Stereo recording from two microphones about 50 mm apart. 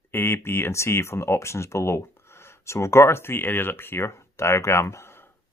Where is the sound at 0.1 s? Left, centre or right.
Left.